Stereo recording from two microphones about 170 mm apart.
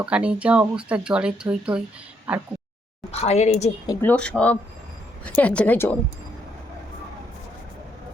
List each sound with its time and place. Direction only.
0.0 s speech: 5° right (ahead or behind)
3.1 s a woman's voice: 40° left (ahead or behind)
4.0 s speech: 5° left (ahead or behind)